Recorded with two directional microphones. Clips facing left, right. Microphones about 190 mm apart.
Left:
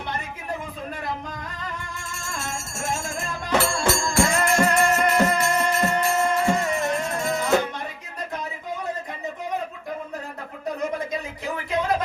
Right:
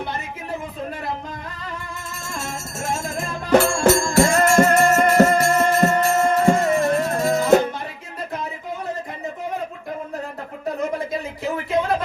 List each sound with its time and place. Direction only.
3.5 s music: 45° right (ahead or behind)